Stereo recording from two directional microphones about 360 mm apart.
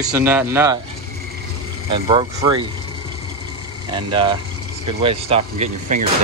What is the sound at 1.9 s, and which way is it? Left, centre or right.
Speech, centre.